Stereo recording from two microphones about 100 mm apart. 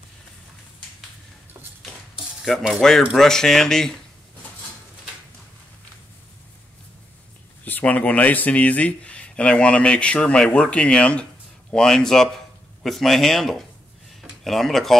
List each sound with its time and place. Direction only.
2.8 s a man's voice: 5° left (ahead or behind)
7.6 s a man's voice: 15° left (ahead or behind)